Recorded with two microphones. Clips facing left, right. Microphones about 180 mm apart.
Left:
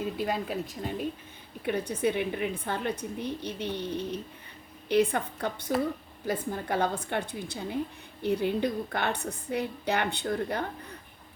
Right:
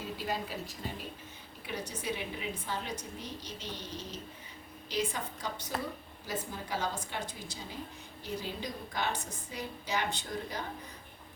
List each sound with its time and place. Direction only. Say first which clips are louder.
0.0 s a woman's voice: left 6 dB; 55° left (ahead or behind)
1.6 s a woman's voice: left 10 dB; 55° left (ahead or behind)